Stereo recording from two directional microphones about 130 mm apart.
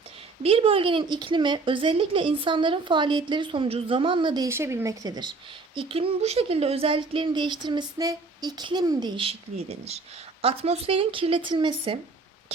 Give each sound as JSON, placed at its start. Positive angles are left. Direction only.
{"t": 0.4, "sound": "speech", "side_deg": -45}
{"t": 4.4, "sound": "speech", "side_deg": -20}
{"t": 5.7, "sound": "speech", "side_deg": -45}